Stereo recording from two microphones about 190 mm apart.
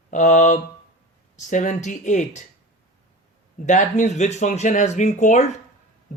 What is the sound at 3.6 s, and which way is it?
Speech, 40° left (ahead or behind).